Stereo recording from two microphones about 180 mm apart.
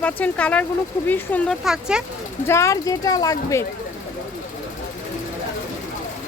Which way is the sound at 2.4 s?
15° left (ahead or behind).